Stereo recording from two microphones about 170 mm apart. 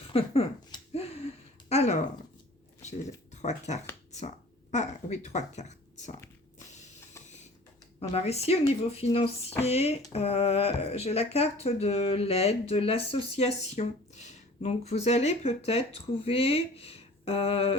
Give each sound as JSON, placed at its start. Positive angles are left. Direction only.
{"t": 0.1, "sound": "a sound", "side_deg": 35}
{"t": 1.7, "sound": "speech", "side_deg": 40}
{"t": 3.3, "sound": "speech", "side_deg": 45}
{"t": 8.1, "sound": "speech", "side_deg": 35}